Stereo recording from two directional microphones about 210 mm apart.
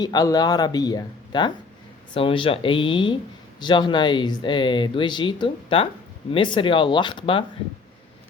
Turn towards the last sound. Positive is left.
turn(degrees=25)  # may be behind; listen again after turning